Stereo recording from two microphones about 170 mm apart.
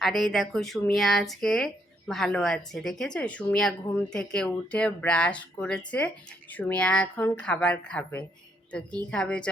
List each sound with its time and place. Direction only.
0.0 s speech: centre (ahead or behind)